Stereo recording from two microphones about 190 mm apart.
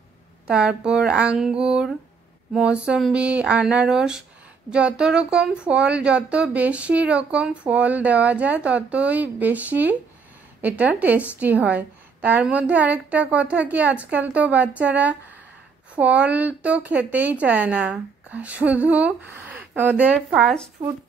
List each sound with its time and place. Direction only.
0.5 s speech: 5° right (ahead or behind)
20.8 s speech: 20° right (ahead or behind)